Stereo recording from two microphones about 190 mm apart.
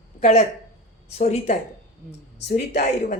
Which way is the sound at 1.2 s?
35° left (ahead or behind).